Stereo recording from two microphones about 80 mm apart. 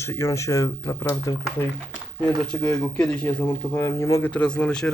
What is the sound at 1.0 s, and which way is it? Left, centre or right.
Speech, left.